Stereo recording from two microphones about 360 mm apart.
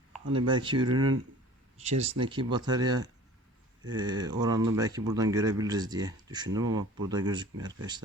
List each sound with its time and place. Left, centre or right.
0.3 s speech: centre